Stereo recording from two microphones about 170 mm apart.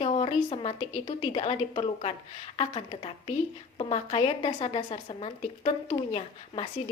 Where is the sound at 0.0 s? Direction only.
40° left (ahead or behind).